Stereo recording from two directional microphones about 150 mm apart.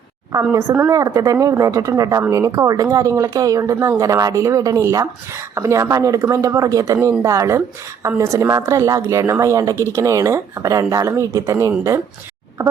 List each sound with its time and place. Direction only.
0.3 s speech: 20° right (ahead or behind)